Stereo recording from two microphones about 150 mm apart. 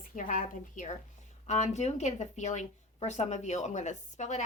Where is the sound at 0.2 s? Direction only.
60° left (ahead or behind).